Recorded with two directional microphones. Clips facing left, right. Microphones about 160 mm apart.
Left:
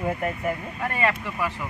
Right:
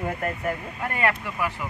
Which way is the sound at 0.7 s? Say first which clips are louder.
Right 1 dB; 5° right (ahead or behind).